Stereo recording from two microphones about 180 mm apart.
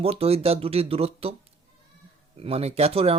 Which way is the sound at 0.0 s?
35° right (ahead or behind).